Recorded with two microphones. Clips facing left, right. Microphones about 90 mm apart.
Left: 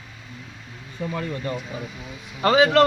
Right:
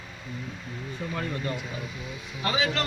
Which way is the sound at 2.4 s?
65° left (ahead or behind).